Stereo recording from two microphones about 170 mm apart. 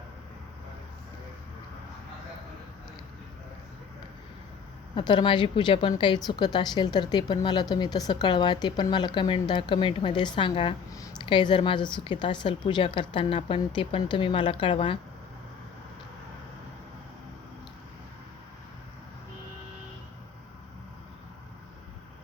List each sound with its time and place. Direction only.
4.9 s a woman's voice: 30° left (ahead or behind)